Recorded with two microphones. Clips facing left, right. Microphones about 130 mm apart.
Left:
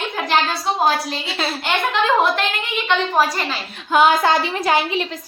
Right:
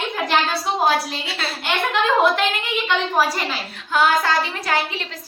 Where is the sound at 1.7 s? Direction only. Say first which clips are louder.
Left 1 dB; centre (ahead or behind).